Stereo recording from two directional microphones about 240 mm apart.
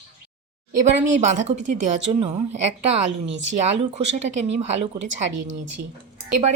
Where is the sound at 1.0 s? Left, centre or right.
Right.